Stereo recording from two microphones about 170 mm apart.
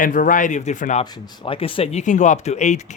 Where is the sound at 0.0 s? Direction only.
50° left (ahead or behind).